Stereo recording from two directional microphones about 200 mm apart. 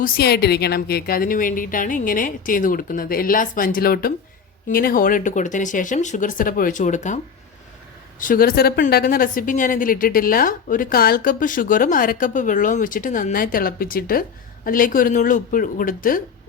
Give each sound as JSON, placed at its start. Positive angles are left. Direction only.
{"t": 0.0, "sound": "speech", "side_deg": 50}
{"t": 8.2, "sound": "speech", "side_deg": 45}